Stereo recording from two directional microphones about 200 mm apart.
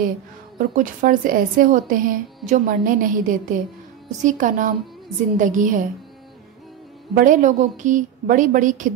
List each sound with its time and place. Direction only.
0.6 s a woman's voice: 45° right (ahead or behind)
7.2 s a woman's voice: 40° right (ahead or behind)